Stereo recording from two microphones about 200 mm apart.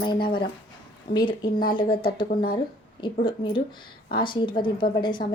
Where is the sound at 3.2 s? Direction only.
25° left (ahead or behind).